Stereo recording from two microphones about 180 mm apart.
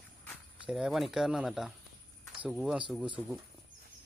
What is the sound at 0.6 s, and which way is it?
Speech, centre (ahead or behind).